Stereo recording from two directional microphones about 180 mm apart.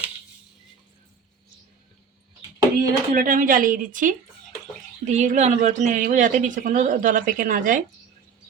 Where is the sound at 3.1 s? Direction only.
50° right (ahead or behind).